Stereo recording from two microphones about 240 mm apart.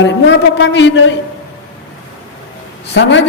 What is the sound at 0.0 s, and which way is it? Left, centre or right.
A man's voice, left.